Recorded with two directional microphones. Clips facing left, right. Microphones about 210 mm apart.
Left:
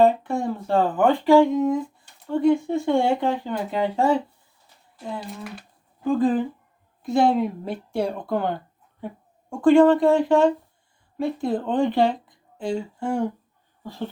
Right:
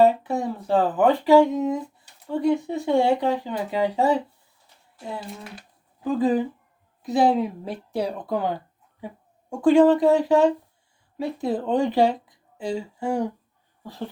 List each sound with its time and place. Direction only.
0.0 s speech: 5° right (ahead or behind)
1.5 s speech: 20° right (ahead or behind)
2.2 s a woman's voice: 5° right (ahead or behind)